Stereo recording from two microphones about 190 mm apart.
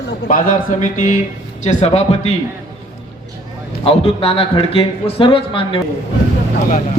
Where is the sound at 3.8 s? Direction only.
30° left (ahead or behind).